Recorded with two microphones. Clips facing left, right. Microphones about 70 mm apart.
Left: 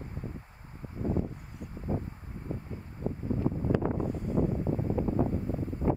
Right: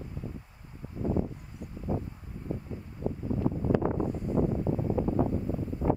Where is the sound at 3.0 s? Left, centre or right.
Right.